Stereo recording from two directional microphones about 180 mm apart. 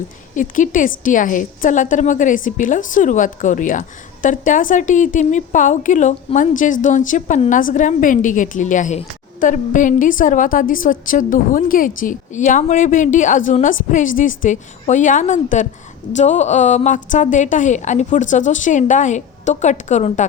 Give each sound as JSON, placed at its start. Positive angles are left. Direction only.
{"t": 0.3, "sound": "a woman's voice", "side_deg": 45}